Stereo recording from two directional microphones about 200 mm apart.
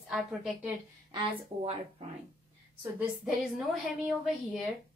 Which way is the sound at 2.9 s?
Centre (ahead or behind).